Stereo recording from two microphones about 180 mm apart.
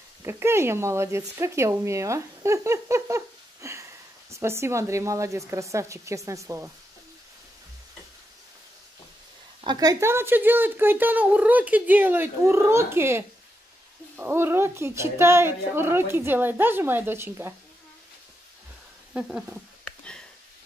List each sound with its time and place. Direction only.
0.2 s speech: 15° right (ahead or behind)
9.6 s speech: 25° right (ahead or behind)
19.1 s speech: centre (ahead or behind)